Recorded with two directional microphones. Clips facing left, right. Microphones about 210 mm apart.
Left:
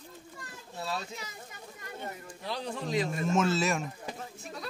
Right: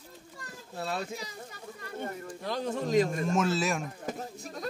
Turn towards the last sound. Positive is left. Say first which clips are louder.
# right 3 dB
turn(degrees=-45)  # may be behind; listen again after turning